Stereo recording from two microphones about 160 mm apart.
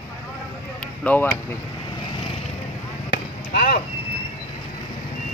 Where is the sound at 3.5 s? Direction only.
75° left (ahead or behind).